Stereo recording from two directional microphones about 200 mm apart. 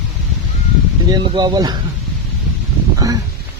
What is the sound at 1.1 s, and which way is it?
Speech, 20° right (ahead or behind).